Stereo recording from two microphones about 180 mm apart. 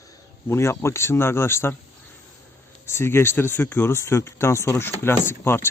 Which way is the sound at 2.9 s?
15° left (ahead or behind).